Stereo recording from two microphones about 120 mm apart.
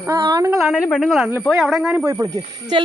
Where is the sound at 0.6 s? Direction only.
5° right (ahead or behind).